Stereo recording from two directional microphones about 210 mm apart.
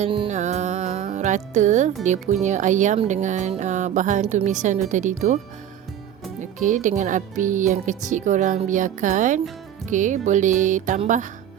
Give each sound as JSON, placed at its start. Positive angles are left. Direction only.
{"t": 0.0, "sound": "music", "side_deg": -30}
{"t": 2.0, "sound": "speech", "side_deg": -35}
{"t": 6.4, "sound": "speech", "side_deg": -35}